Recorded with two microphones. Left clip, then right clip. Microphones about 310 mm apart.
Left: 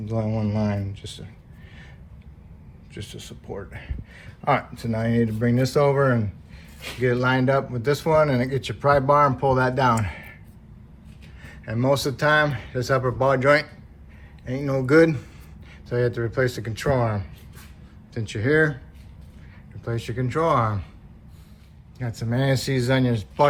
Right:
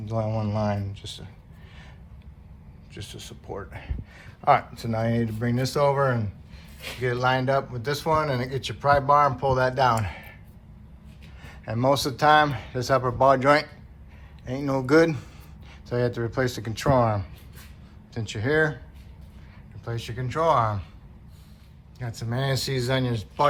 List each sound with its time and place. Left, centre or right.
0.0 s speech: centre
2.9 s speech: centre
11.4 s speech: centre
19.8 s speech: centre
21.9 s speech: centre